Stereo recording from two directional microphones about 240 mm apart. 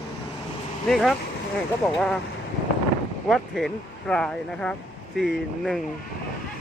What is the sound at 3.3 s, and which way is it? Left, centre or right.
Speech, centre.